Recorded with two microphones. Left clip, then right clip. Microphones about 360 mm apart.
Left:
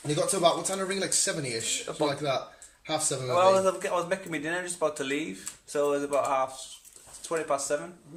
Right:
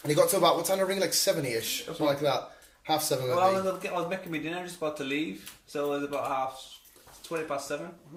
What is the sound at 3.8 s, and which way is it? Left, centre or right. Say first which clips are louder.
Speech: left 3 dB; centre.